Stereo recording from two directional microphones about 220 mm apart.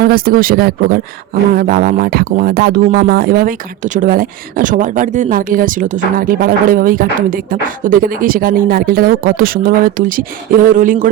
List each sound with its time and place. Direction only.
0.0 s speech: 40° right (ahead or behind)